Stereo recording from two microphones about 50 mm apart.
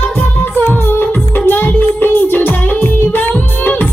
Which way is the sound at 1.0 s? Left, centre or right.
Left.